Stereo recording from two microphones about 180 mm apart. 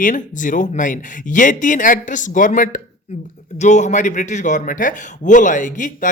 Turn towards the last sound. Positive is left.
turn(degrees=45)  # may be behind; listen again after turning